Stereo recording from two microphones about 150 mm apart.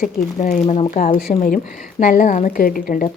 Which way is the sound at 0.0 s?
70° left (ahead or behind).